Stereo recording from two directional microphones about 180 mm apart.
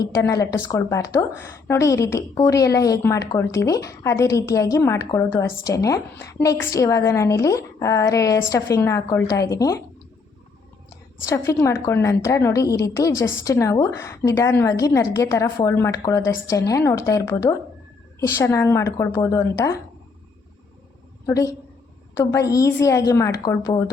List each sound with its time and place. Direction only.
0.0 s a woman's voice: 20° left (ahead or behind)
11.3 s a woman's voice: 15° left (ahead or behind)
21.2 s a woman's voice: 15° left (ahead or behind)